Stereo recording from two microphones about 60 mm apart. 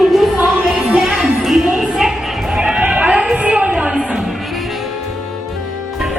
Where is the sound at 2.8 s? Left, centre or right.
Right.